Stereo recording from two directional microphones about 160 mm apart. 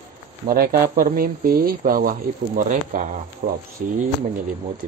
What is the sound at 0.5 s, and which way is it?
Speech, 70° right (ahead or behind).